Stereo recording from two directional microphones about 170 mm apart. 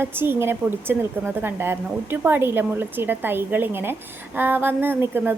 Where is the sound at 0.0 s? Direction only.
15° right (ahead or behind).